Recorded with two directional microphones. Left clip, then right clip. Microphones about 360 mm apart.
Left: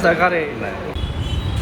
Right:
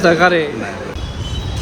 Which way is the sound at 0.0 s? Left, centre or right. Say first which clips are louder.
Right 4 dB; right.